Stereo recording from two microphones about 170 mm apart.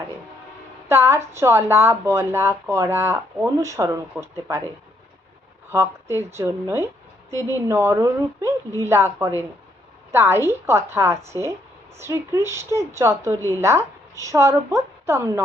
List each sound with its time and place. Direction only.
0.9 s speech: 15° right (ahead or behind)
5.7 s a woman's voice: 15° right (ahead or behind)